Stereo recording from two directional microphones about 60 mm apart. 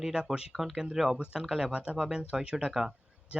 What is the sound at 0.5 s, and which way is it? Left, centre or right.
Speech, centre.